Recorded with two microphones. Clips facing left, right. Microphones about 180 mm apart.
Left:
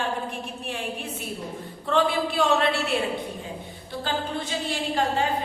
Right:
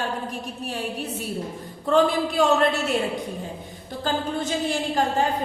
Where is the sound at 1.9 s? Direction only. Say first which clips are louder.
Right 3 dB; 45° right (ahead or behind).